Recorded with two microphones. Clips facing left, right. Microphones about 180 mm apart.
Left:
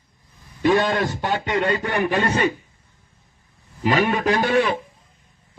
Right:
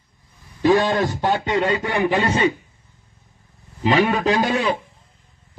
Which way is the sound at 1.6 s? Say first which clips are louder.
Right 1 dB; 15° right (ahead or behind).